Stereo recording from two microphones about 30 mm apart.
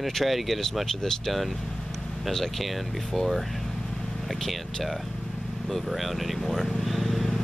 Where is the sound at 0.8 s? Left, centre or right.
Centre.